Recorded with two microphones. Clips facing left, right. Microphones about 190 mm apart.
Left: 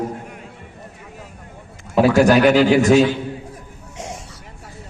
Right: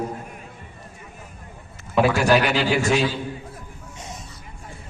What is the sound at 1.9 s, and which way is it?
A man's voice, 40° left (ahead or behind).